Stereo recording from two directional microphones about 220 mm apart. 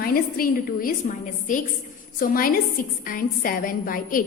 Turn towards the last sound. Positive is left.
turn(degrees=40)  # may be behind; listen again after turning